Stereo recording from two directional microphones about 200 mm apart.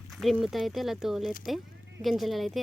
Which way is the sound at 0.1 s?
Centre (ahead or behind).